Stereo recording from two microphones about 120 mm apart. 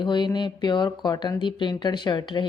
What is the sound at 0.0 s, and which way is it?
Speech, 40° left (ahead or behind).